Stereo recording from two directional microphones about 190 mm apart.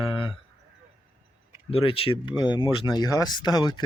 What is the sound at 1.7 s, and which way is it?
Speech, 30° left (ahead or behind).